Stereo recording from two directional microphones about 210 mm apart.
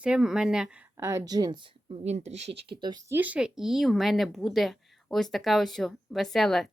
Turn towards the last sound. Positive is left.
turn(degrees=0)  # may be behind; listen again after turning